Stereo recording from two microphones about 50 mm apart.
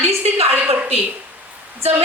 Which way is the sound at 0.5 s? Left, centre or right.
Right.